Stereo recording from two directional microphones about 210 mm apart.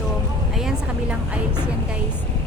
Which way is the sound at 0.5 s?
5° right (ahead or behind).